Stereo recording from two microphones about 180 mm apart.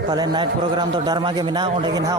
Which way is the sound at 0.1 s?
25° right (ahead or behind).